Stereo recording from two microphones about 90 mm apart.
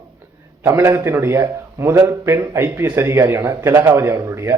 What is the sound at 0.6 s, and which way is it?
A man's voice, 30° right (ahead or behind).